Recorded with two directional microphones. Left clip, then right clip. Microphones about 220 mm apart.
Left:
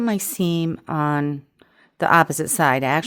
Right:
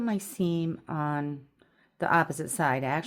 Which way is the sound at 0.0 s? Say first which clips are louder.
Left 8 dB; 55° left (ahead or behind).